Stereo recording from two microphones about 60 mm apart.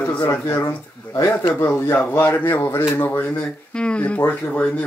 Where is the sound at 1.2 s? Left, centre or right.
Left.